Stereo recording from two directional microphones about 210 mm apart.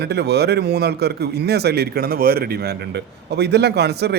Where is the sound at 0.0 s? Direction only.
50° right (ahead or behind).